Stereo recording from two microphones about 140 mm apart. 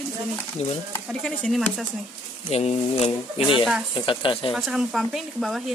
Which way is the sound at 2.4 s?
50° left (ahead or behind).